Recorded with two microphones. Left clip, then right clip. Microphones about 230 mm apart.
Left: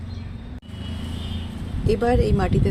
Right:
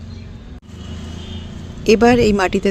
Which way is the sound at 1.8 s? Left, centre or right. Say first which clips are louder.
Right 9 dB; right.